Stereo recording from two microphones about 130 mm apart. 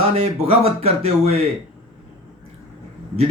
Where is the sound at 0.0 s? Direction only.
50° right (ahead or behind).